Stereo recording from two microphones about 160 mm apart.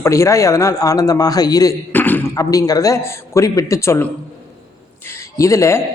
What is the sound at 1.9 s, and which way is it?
A man's voice, 10° left (ahead or behind).